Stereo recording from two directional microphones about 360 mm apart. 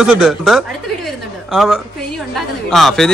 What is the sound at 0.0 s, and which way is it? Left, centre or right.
A man's voice, centre.